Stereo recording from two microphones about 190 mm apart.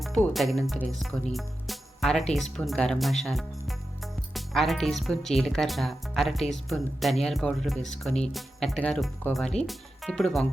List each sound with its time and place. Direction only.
0.0 s speech: centre (ahead or behind)